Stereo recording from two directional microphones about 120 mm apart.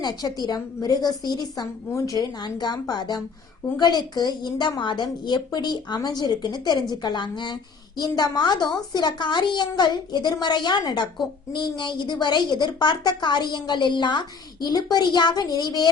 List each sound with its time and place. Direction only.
0.0 s a woman's voice: 35° left (ahead or behind)